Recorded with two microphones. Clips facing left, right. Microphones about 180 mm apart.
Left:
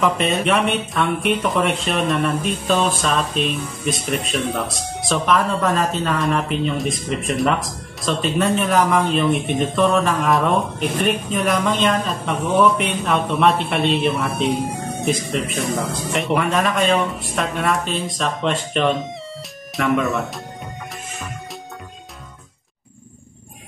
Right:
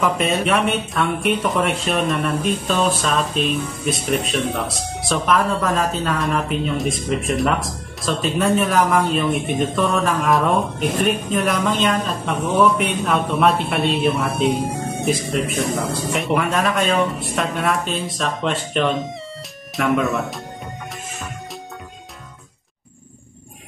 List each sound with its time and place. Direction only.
0.0 s a woman's voice: centre (ahead or behind)